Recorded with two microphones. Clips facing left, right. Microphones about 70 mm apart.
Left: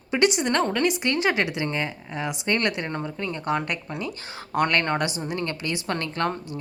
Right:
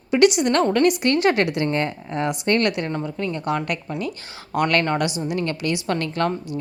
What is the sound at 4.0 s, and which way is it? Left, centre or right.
Speech, left.